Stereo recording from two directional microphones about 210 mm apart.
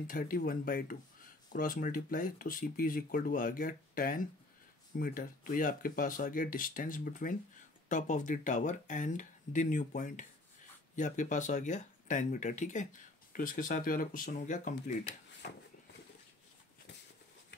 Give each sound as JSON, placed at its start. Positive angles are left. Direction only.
{"t": 0.0, "sound": "speech", "side_deg": 40}